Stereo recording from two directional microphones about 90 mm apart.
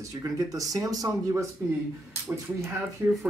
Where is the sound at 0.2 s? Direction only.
40° right (ahead or behind).